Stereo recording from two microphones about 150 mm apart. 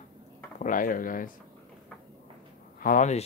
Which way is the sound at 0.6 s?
65° left (ahead or behind).